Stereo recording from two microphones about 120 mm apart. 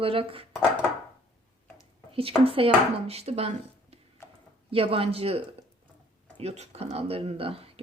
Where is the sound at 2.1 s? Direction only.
50° right (ahead or behind).